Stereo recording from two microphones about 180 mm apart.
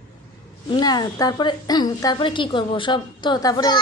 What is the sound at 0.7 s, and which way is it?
A woman's voice, 20° left (ahead or behind).